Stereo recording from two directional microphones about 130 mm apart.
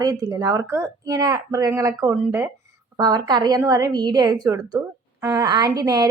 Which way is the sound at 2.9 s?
30° right (ahead or behind).